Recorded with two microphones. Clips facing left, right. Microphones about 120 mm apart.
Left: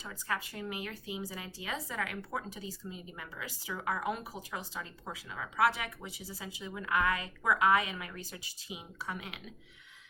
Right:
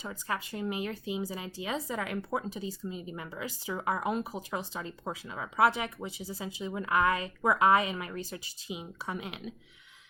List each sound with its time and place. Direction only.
0.0 s speech: 20° right (ahead or behind)